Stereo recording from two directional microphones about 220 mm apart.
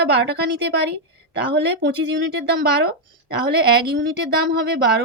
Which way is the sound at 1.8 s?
50° right (ahead or behind).